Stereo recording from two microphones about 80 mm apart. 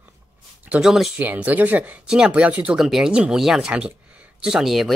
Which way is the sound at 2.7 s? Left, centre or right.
Centre.